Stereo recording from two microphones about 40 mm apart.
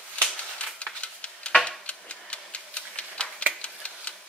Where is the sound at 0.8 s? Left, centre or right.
Left.